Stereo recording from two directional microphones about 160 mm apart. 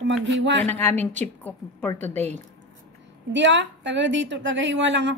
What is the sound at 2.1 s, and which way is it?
Speech, 45° right (ahead or behind).